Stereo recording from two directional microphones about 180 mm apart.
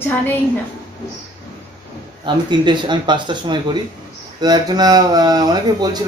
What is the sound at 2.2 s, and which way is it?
Speech, 25° right (ahead or behind).